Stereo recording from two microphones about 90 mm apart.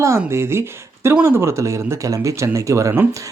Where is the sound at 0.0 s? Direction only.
30° right (ahead or behind).